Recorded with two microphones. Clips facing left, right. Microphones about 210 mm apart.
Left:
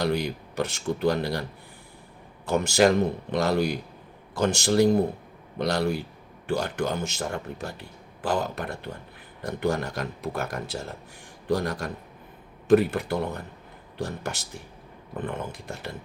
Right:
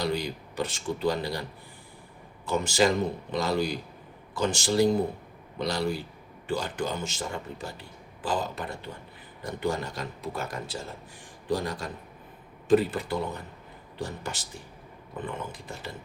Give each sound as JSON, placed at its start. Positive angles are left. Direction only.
{"t": 0.0, "sound": "speech", "side_deg": 65}
{"t": 15.2, "sound": "speech", "side_deg": 65}